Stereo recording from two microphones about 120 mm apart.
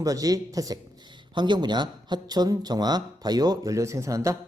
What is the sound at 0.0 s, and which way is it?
Speech, 30° right (ahead or behind).